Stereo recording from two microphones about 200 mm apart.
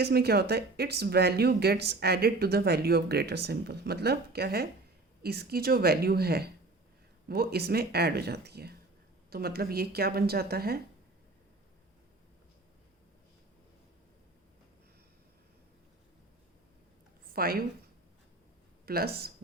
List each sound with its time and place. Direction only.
0.0 s speech: 50° right (ahead or behind)
17.3 s speech: 50° right (ahead or behind)
18.9 s speech: 50° right (ahead or behind)